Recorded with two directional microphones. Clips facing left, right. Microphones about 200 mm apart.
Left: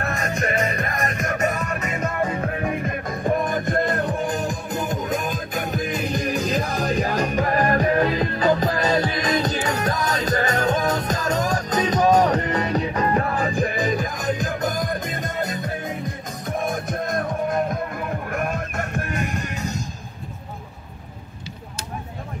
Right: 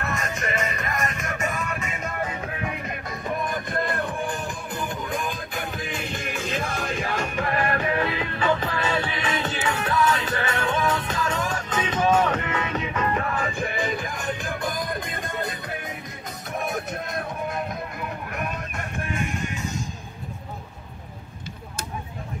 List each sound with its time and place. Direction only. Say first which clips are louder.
0.0 s music: left 4 dB; 35° left (ahead or behind)
17.0 s music: left 6 dB; 45° left (ahead or behind)